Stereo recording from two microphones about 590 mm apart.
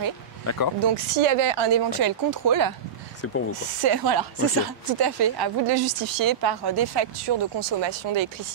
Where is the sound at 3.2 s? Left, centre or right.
Left.